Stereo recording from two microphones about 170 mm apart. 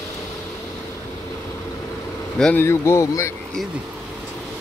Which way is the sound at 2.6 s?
15° left (ahead or behind).